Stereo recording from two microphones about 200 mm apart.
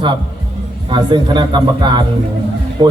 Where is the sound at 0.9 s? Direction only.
20° right (ahead or behind).